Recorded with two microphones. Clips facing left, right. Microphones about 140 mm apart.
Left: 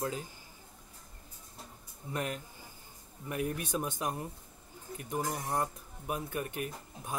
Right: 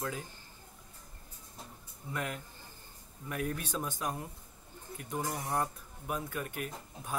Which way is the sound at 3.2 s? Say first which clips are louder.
Left 2 dB; 20° left (ahead or behind).